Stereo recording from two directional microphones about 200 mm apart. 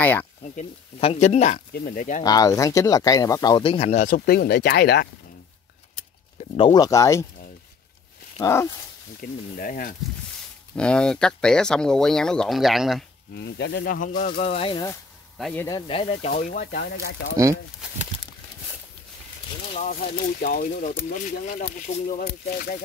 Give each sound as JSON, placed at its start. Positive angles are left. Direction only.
{"t": 0.0, "sound": "speech", "side_deg": 10}
{"t": 0.4, "sound": "speech", "side_deg": 35}
{"t": 1.7, "sound": "speech", "side_deg": 45}
{"t": 2.2, "sound": "speech", "side_deg": 20}
{"t": 6.5, "sound": "speech", "side_deg": 25}
{"t": 8.4, "sound": "speech", "side_deg": 15}
{"t": 9.2, "sound": "speech", "side_deg": 45}
{"t": 10.8, "sound": "speech", "side_deg": 5}
{"t": 13.3, "sound": "speech", "side_deg": 60}
{"t": 15.3, "sound": "speech", "side_deg": 0}
{"t": 15.6, "sound": "speech", "side_deg": 25}
{"t": 16.3, "sound": "speech", "side_deg": 40}
{"t": 17.4, "sound": "speech", "side_deg": -15}
{"t": 19.9, "sound": "speech", "side_deg": 50}